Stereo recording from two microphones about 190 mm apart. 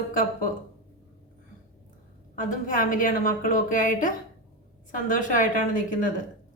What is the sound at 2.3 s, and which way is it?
A woman's voice, 45° left (ahead or behind).